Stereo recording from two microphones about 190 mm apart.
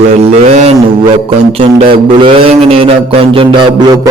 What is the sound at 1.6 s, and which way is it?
Mantra, 30° right (ahead or behind).